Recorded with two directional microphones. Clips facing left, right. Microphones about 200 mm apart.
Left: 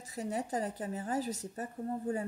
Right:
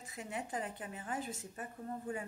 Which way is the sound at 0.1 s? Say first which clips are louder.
Left 7 dB; 40° left (ahead or behind).